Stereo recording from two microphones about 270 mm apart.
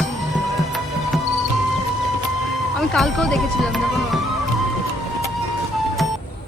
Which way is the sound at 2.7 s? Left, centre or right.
Centre.